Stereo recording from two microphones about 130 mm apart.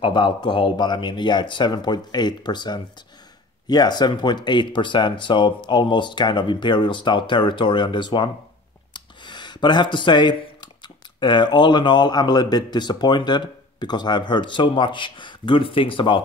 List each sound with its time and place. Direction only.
0.0 s speech: 40° left (ahead or behind)